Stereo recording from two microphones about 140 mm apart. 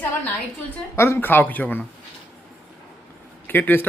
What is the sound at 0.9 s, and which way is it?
Speech, 20° left (ahead or behind).